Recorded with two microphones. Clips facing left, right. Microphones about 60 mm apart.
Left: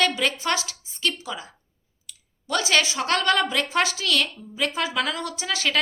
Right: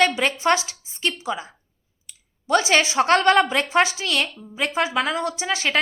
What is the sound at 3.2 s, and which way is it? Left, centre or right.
A woman's voice, right.